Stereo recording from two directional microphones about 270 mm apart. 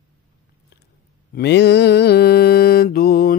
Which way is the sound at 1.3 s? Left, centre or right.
Left.